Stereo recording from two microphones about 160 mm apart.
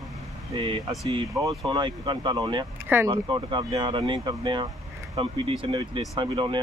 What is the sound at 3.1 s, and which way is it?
Speech, 30° right (ahead or behind).